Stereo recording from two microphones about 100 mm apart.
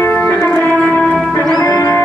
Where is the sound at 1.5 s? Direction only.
35° left (ahead or behind).